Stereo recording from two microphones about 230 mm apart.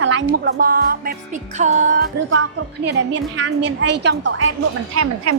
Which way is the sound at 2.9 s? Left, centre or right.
Right.